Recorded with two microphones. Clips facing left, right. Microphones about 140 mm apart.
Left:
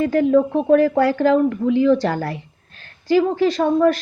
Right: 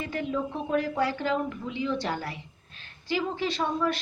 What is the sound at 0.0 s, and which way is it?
A woman's voice, 45° left (ahead or behind).